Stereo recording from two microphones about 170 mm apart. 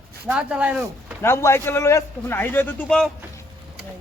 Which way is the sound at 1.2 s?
15° left (ahead or behind).